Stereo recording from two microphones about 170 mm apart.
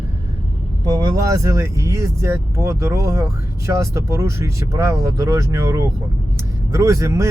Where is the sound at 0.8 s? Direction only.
20° right (ahead or behind).